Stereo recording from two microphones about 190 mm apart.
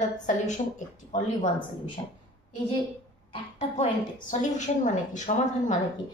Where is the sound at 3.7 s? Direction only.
40° left (ahead or behind).